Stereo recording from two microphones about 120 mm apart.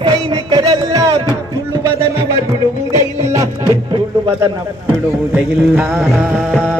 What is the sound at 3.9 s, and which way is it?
Music, 45° right (ahead or behind).